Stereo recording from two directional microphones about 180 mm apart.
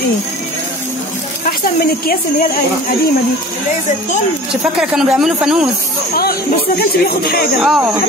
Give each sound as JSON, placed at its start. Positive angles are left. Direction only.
{"t": 4.5, "sound": "speech", "side_deg": -5}
{"t": 6.8, "sound": "speech", "side_deg": 55}
{"t": 7.6, "sound": "speech", "side_deg": 0}